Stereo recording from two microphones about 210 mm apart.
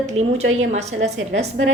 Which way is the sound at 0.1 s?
30° right (ahead or behind).